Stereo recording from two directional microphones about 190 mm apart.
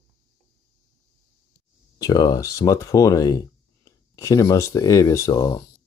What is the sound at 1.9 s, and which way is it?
Speech, 20° left (ahead or behind).